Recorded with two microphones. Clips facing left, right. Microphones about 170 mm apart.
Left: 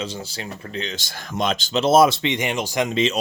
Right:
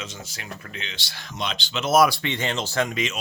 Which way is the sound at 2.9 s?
30° left (ahead or behind).